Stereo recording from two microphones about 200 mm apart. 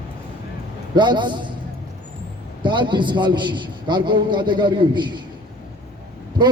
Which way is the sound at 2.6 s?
25° right (ahead or behind).